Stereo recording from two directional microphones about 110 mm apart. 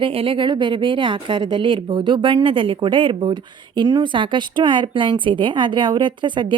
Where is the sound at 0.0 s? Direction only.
55° right (ahead or behind).